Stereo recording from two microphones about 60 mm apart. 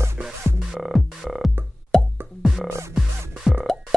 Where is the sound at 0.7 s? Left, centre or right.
Centre.